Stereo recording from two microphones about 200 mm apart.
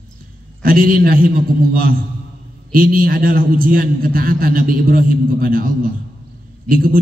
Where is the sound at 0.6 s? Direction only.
45° right (ahead or behind).